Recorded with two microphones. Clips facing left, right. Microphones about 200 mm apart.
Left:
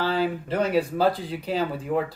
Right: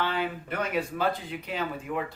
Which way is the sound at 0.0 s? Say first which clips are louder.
Left 5 dB; 35° left (ahead or behind).